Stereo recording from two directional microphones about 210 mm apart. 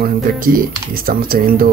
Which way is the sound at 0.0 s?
45° right (ahead or behind).